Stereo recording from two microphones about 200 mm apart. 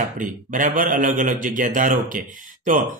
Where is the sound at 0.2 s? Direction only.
40° right (ahead or behind).